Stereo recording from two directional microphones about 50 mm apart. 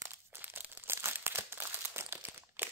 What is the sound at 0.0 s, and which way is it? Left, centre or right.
Crumpling, right.